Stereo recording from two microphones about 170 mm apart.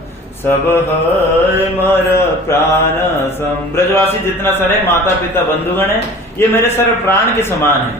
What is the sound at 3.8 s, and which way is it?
Mantra, 15° left (ahead or behind).